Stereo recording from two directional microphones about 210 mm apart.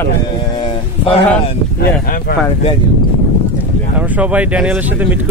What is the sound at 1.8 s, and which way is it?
Speech, 50° left (ahead or behind).